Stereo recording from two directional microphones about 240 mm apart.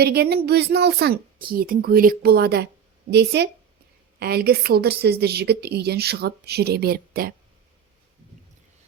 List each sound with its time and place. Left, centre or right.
0.0 s a woman's voice: right